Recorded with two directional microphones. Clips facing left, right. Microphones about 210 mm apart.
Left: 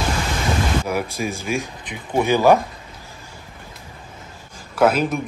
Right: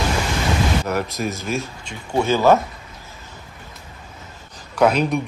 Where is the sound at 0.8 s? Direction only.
10° left (ahead or behind).